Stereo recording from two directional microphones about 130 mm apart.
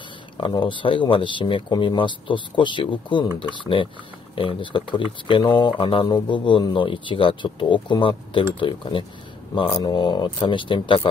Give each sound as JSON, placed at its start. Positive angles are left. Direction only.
{"t": 0.4, "sound": "speech", "side_deg": 40}